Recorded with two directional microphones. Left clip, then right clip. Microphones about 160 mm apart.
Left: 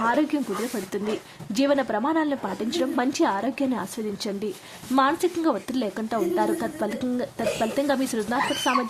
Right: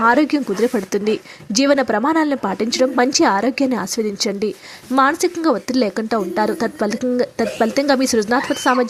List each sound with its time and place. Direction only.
0.0 s a woman's voice: 35° right (ahead or behind)